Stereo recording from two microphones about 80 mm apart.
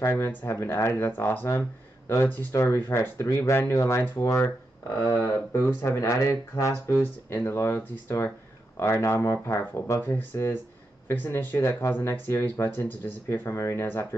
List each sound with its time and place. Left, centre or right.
0.0 s speech: left
3.7 s speech: left
5.8 s speech: left
10.0 s speech: left
11.5 s speech: left
13.3 s speech: left